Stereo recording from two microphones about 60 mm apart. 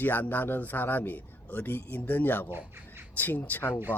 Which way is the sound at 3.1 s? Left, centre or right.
Left.